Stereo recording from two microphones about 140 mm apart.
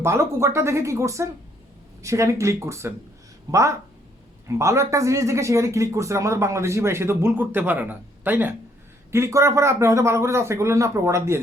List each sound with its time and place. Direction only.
0.0 s a man's voice: 20° right (ahead or behind)